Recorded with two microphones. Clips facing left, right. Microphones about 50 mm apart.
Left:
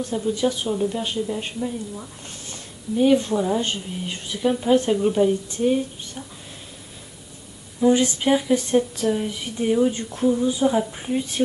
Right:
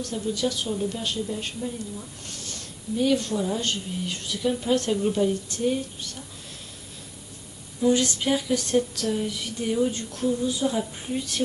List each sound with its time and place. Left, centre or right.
0.0 s a woman's voice: left
7.8 s a woman's voice: left